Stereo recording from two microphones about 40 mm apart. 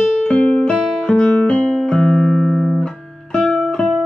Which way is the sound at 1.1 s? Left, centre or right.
Left.